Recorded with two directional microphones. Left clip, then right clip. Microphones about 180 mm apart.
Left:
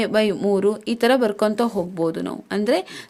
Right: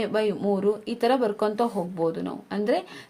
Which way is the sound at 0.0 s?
50° left (ahead or behind).